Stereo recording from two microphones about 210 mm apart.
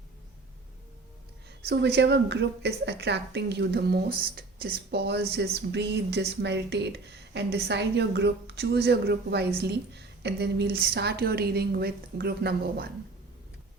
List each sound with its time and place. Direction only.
1.6 s speech: 55° right (ahead or behind)